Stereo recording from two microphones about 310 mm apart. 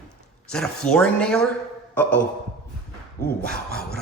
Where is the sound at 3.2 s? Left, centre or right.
Left.